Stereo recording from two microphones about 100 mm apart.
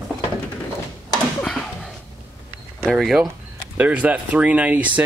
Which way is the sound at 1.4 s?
5° left (ahead or behind).